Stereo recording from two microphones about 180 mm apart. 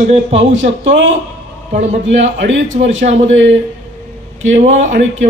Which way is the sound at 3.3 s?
90° right.